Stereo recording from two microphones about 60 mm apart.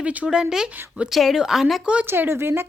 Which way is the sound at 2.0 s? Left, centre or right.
Right.